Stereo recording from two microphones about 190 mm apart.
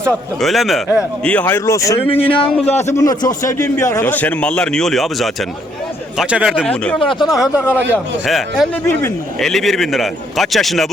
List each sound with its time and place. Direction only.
0.0 s a man's voice: centre (ahead or behind)
2.0 s speech: 30° left (ahead or behind)
2.4 s a man's voice: 5° left (ahead or behind)
3.0 s a man's voice: 20° left (ahead or behind); by 10.9 s centre (ahead or behind)